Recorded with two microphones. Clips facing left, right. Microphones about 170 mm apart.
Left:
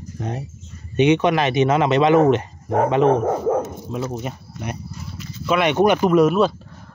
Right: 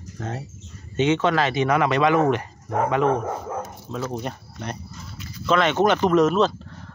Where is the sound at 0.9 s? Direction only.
15° left (ahead or behind).